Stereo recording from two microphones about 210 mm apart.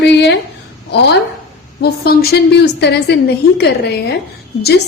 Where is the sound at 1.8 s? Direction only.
50° left (ahead or behind).